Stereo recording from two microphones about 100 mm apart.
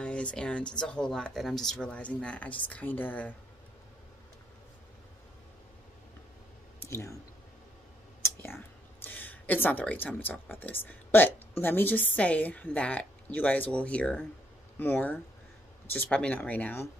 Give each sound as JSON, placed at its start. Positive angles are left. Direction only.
{"t": 0.0, "sound": "speech", "side_deg": 10}
{"t": 6.8, "sound": "speech", "side_deg": 30}
{"t": 8.2, "sound": "a sound", "side_deg": 25}
{"t": 11.6, "sound": "speech", "side_deg": 20}